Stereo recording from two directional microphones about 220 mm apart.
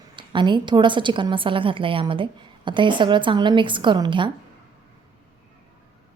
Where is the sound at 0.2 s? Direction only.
20° right (ahead or behind).